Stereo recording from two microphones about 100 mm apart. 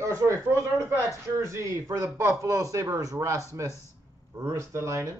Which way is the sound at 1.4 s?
30° right (ahead or behind).